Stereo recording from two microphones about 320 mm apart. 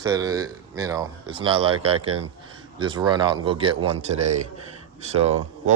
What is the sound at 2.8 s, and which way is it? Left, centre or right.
A man's voice, centre.